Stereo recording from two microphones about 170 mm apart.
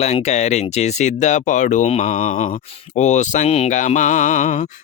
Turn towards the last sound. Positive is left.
turn(degrees=45)  # may be behind; listen again after turning